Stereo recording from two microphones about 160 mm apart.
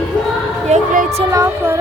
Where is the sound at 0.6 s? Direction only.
50° right (ahead or behind).